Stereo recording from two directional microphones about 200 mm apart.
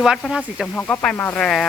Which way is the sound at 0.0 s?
Centre (ahead or behind).